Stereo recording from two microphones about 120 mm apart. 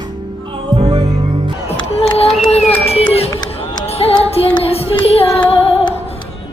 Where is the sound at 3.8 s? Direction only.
60° left (ahead or behind).